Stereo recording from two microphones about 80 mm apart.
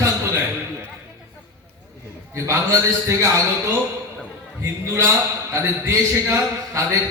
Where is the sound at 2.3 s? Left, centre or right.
Right.